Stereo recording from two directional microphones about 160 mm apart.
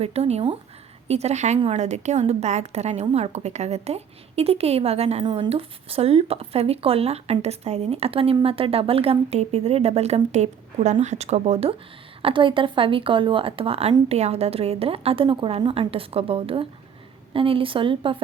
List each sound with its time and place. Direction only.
0.0 s speech: 40° right (ahead or behind)
1.5 s speech: 35° right (ahead or behind)
1.8 s speech: 45° right (ahead or behind)
12.2 s speech: 30° right (ahead or behind)